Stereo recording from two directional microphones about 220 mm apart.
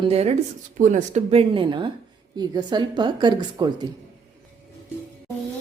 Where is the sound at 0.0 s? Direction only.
30° right (ahead or behind).